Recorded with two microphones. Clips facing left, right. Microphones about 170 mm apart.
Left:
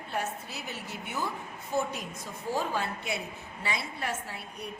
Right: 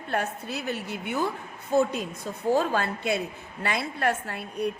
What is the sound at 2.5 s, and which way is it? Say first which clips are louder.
A woman's voice: right 6 dB; 70° right (ahead or behind).